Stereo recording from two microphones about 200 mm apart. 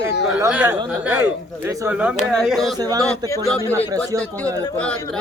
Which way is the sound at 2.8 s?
20° right (ahead or behind).